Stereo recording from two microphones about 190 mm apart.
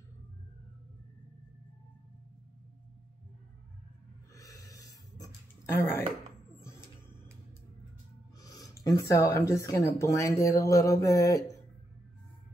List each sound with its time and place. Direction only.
4.4 s a sound: 20° left (ahead or behind)
8.4 s speech: 20° left (ahead or behind)
10.6 s mantra: 20° left (ahead or behind)